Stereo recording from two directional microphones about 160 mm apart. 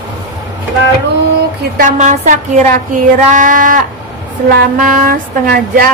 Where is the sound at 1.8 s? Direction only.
55° right (ahead or behind).